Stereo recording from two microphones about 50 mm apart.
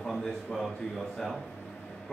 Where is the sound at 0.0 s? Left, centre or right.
Centre.